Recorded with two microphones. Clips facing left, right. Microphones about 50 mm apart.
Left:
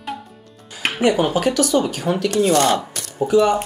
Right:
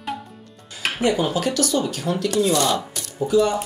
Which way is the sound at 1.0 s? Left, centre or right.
Left.